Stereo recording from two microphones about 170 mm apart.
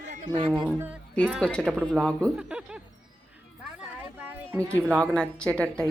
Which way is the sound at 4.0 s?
10° right (ahead or behind).